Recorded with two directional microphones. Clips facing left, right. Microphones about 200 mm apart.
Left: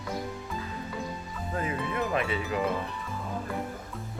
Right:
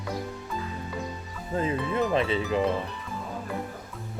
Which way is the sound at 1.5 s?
25° right (ahead or behind).